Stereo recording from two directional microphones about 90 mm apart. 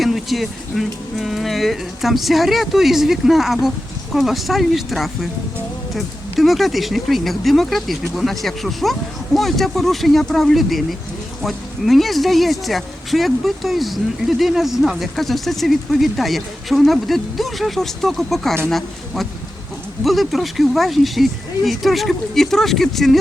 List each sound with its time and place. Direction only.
0.0 s a woman's voice: centre (ahead or behind)